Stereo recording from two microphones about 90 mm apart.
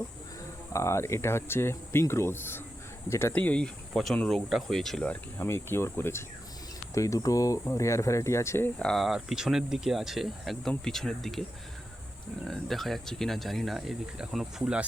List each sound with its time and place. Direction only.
0.7 s speech: 30° left (ahead or behind)
3.3 s speech: 15° left (ahead or behind)
5.4 s speech: 25° left (ahead or behind)
8.8 s speech: centre (ahead or behind)
12.5 s speech: 5° left (ahead or behind)